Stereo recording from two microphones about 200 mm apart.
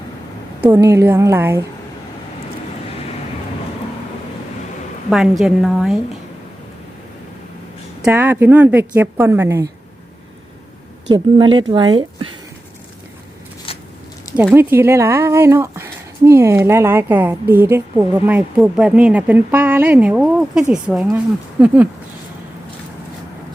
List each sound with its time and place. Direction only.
0.7 s speech: 15° right (ahead or behind)
5.0 s a woman's voice: centre (ahead or behind)
8.0 s speech: 10° right (ahead or behind)
11.1 s speech: 25° right (ahead or behind)
13.7 s a sound: 30° left (ahead or behind)
14.3 s speech: 10° right (ahead or behind)